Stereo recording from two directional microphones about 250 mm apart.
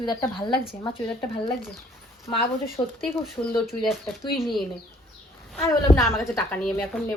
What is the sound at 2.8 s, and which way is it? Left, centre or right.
Speech, centre.